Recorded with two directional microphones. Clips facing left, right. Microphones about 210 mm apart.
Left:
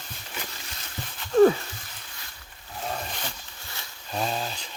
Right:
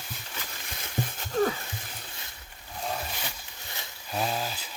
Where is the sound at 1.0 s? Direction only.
50° right (ahead or behind).